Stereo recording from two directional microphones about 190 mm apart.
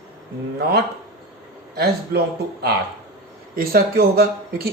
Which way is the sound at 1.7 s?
60° right (ahead or behind).